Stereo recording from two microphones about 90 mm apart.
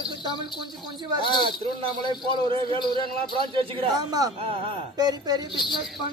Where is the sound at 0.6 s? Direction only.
60° right (ahead or behind); by 2.8 s 80° right.